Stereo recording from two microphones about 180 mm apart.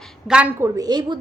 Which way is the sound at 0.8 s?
25° right (ahead or behind).